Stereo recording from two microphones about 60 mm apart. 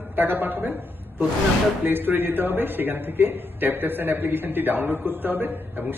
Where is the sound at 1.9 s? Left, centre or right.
Right.